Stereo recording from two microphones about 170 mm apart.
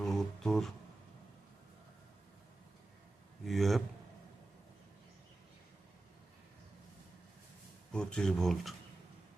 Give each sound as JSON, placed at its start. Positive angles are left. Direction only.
{"t": 0.0, "sound": "a sound", "side_deg": 5}
{"t": 3.4, "sound": "a man's voice", "side_deg": 0}
{"t": 7.9, "sound": "speech", "side_deg": 5}